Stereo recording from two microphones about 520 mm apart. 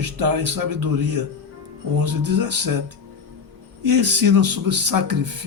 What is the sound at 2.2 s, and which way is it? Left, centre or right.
Speech, right.